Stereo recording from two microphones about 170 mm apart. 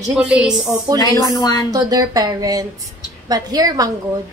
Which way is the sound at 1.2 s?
20° left (ahead or behind).